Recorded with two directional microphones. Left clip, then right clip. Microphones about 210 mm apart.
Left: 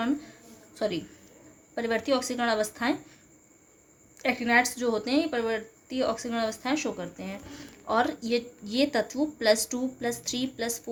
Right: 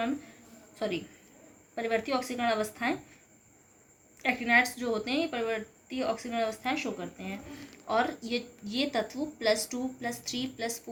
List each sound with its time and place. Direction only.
1.7 s a woman's voice: 55° left (ahead or behind)
4.2 s a woman's voice: 55° left (ahead or behind)